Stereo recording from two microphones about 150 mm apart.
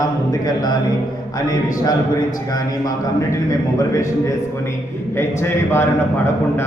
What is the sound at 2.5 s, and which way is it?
Speech, 25° left (ahead or behind).